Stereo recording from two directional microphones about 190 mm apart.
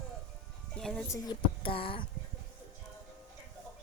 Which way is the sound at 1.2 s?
25° left (ahead or behind).